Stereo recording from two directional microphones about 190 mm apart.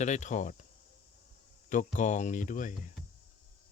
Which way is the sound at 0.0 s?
40° left (ahead or behind).